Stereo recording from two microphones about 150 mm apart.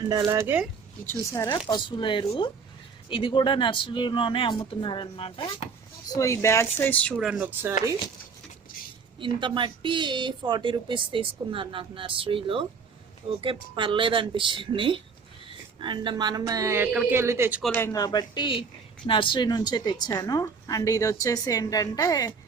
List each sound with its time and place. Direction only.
0.0 s speech: 25° right (ahead or behind)
1.0 s a woman's voice: 20° left (ahead or behind)
1.5 s a woman's voice: 30° left (ahead or behind)
6.1 s speech: 20° left (ahead or behind)
7.2 s speech: 5° right (ahead or behind)
9.1 s a woman's voice: 35° right (ahead or behind); by 17.6 s 15° right (ahead or behind)
17.7 s a woman's voice: 20° left (ahead or behind)